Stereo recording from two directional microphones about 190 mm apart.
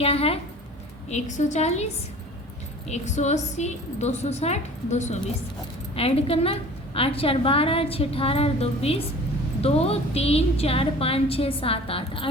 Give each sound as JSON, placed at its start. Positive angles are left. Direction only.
{"t": 0.0, "sound": "a woman's voice", "side_deg": 30}